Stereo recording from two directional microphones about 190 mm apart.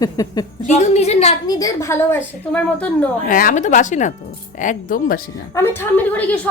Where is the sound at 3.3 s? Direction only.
45° left (ahead or behind).